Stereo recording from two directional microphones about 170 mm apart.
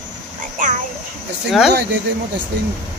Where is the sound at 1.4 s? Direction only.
5° right (ahead or behind).